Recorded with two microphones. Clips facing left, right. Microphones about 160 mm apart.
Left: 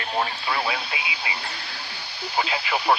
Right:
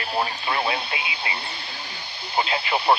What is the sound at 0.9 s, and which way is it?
Speech, 55° right (ahead or behind).